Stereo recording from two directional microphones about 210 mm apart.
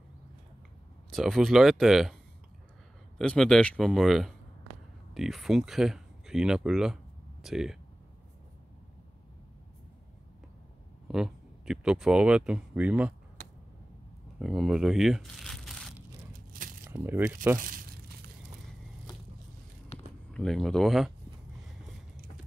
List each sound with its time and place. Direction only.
1.1 s speech: centre (ahead or behind)
3.2 s speech: 5° left (ahead or behind)
11.1 s speech: 5° right (ahead or behind)
14.4 s speech: centre (ahead or behind)
16.3 s crumpling: 40° right (ahead or behind)
16.8 s speech: 10° right (ahead or behind)
17.6 s crumpling: 40° right (ahead or behind)
19.9 s a sound: 30° left (ahead or behind)
20.2 s speech: centre (ahead or behind)